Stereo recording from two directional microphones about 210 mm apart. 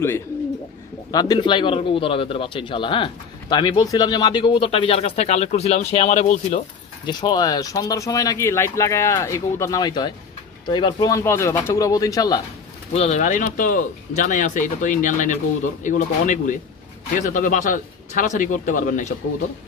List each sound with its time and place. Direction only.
1.1 s speech: 20° left (ahead or behind); by 6.6 s 35° left (ahead or behind)
7.1 s speech: 20° left (ahead or behind)
12.9 s speech: 30° left (ahead or behind)